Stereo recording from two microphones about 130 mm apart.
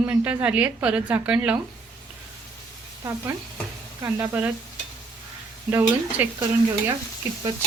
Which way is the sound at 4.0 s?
30° right (ahead or behind).